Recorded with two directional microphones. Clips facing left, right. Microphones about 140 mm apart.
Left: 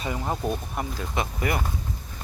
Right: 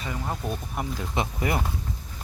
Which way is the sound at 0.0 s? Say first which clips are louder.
Left 3 dB; 20° left (ahead or behind).